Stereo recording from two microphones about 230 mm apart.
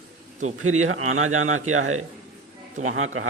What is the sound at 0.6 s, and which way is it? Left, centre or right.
A man's voice, right.